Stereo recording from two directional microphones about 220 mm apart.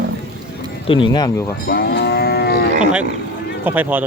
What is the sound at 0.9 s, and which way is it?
Speech, 20° left (ahead or behind).